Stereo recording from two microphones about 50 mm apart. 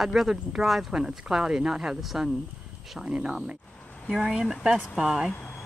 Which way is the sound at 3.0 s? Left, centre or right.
Centre.